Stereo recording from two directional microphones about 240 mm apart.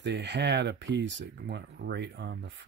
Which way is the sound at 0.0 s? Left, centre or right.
Right.